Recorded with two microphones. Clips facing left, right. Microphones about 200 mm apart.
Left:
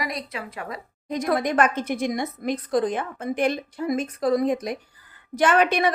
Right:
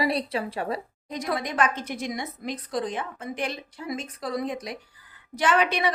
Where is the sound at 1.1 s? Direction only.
50° left (ahead or behind).